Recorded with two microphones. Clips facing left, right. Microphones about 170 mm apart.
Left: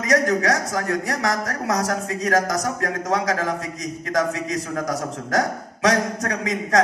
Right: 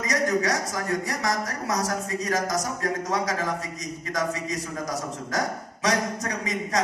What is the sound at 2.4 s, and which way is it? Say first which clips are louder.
Speech: left 3 dB; 60° left (ahead or behind).